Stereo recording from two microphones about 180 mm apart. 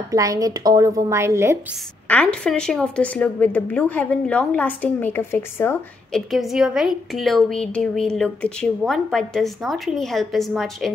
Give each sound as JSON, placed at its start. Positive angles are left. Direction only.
{"t": 0.1, "sound": "a woman's voice", "side_deg": -20}
{"t": 2.0, "sound": "a woman's voice", "side_deg": 5}
{"t": 6.3, "sound": "a woman's voice", "side_deg": 0}